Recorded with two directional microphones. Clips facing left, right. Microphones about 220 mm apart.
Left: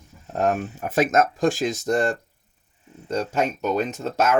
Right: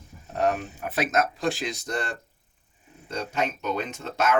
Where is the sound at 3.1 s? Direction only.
45° left (ahead or behind).